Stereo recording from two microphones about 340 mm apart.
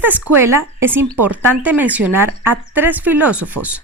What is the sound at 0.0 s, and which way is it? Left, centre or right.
Speech, centre.